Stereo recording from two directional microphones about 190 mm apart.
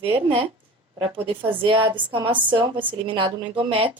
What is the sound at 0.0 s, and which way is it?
Speech, 30° right (ahead or behind).